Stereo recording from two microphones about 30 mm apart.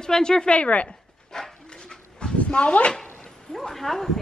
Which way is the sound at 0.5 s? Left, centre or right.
Left.